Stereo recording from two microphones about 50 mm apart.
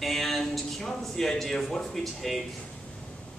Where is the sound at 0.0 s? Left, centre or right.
Centre.